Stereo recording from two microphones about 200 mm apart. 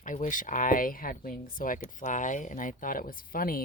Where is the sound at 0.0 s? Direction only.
40° left (ahead or behind).